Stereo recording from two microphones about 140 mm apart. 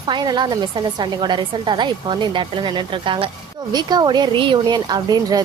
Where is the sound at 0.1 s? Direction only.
30° right (ahead or behind).